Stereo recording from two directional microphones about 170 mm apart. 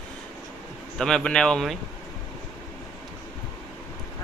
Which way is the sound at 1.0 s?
5° left (ahead or behind).